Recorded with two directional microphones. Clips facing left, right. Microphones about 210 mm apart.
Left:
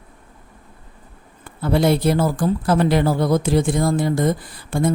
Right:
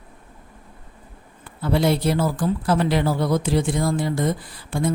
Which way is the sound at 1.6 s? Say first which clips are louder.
Left 3 dB; 50° left (ahead or behind).